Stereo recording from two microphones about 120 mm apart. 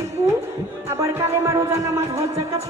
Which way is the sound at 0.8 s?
25° right (ahead or behind).